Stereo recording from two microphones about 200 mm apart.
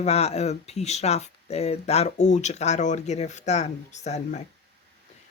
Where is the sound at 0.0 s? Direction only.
30° left (ahead or behind).